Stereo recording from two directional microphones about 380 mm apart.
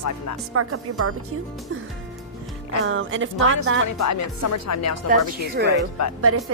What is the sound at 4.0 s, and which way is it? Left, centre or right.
Speech, left.